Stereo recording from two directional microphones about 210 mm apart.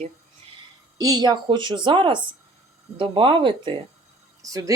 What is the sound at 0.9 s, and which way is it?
A woman's voice, 15° right (ahead or behind).